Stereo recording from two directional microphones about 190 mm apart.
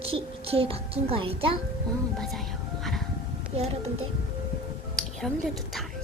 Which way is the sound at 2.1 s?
Centre (ahead or behind).